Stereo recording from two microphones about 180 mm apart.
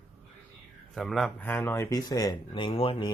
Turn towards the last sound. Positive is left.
turn(degrees=30)  # may be behind; listen again after turning